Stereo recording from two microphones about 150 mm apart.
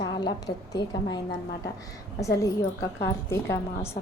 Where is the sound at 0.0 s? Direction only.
25° left (ahead or behind).